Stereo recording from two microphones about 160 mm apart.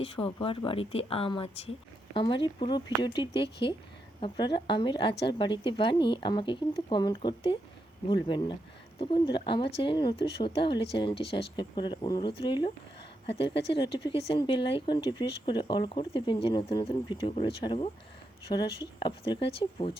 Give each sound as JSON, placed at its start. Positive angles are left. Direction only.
{"t": 0.0, "sound": "speech", "side_deg": 35}